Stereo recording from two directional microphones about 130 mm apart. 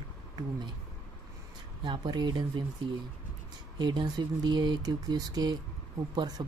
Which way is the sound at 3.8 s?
35° right (ahead or behind).